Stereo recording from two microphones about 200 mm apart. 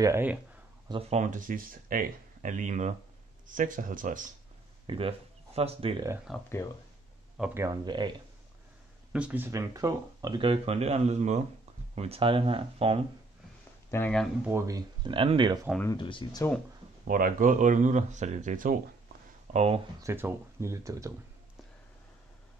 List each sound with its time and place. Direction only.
0.0 s speech: 10° right (ahead or behind)
0.8 s speech: 25° right (ahead or behind)
1.2 s speech: 40° right (ahead or behind)
4.8 s speech: 25° right (ahead or behind)
6.3 s speech: centre (ahead or behind)
7.6 s speech: 20° right (ahead or behind)
9.1 s speech: 5° right (ahead or behind); by 13.0 s 30° right (ahead or behind)
13.8 s speech: 10° left (ahead or behind)
14.5 s speech: 20° right (ahead or behind)
16.0 s speech: 25° left (ahead or behind)
17.1 s speech: 40° right (ahead or behind)
20.0 s speech: 10° right (ahead or behind)